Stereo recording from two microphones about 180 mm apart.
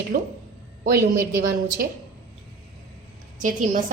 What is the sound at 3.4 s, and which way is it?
Speech, 50° right (ahead or behind).